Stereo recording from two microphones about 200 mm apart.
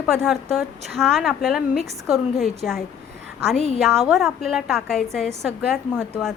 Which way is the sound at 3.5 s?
30° left (ahead or behind).